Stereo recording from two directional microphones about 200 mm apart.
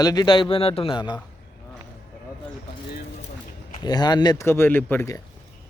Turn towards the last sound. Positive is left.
turn(degrees=15)  # may be behind; listen again after turning